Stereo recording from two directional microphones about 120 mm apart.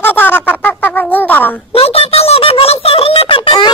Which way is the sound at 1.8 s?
55° left (ahead or behind).